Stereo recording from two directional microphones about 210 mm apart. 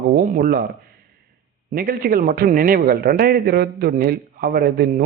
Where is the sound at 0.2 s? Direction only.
45° right (ahead or behind).